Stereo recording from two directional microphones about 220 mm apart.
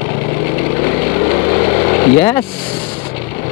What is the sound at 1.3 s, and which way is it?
Vehicle, 20° left (ahead or behind).